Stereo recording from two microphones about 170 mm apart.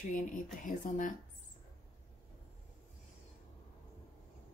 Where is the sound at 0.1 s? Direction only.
50° left (ahead or behind).